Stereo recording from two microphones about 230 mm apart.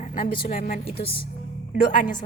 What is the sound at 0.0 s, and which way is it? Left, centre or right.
Speech, left.